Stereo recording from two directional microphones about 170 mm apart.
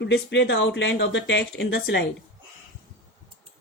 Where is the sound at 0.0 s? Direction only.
90° left.